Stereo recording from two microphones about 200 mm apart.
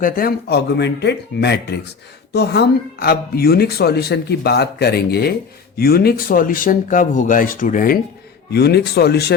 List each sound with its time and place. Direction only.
0.0 s speech: 45° left (ahead or behind)
8.5 s speech: 55° left (ahead or behind)